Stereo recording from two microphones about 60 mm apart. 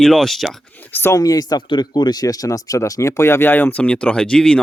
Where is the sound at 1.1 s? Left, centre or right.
Left.